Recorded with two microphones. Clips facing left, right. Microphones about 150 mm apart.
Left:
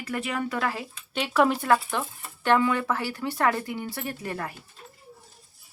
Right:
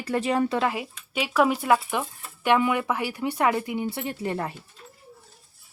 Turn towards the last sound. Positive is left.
turn(degrees=-25)  # may be behind; listen again after turning